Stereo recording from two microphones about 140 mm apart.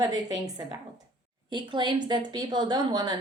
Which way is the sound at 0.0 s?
30° right (ahead or behind).